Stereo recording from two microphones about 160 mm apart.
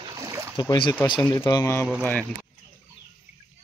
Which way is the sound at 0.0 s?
20° right (ahead or behind).